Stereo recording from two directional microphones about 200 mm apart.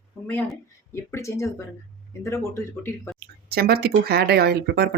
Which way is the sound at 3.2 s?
50° right (ahead or behind).